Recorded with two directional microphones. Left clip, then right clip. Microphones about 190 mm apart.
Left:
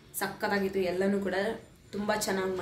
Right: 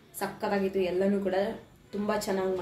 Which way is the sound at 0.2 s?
10° right (ahead or behind).